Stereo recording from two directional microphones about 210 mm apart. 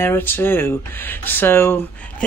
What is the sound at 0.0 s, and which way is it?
Speech, 10° left (ahead or behind).